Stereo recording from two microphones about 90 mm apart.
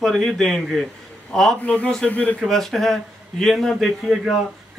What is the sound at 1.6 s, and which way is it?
Speech, 15° left (ahead or behind).